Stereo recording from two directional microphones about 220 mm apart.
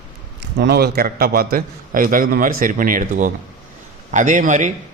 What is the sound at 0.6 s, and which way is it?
A man's voice, 45° right (ahead or behind).